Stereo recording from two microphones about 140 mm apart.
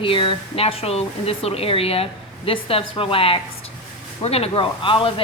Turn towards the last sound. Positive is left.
turn(degrees=40)  # may be behind; listen again after turning